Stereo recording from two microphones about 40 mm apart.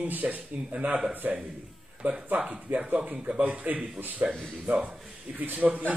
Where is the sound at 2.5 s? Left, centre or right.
Right.